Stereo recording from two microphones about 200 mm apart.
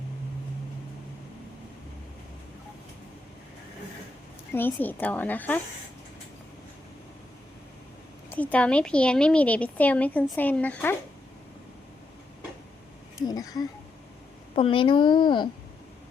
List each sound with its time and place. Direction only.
4.5 s a woman's voice: 10° left (ahead or behind)
8.3 s a woman's voice: 10° left (ahead or behind)
13.1 s a woman's voice: 20° left (ahead or behind)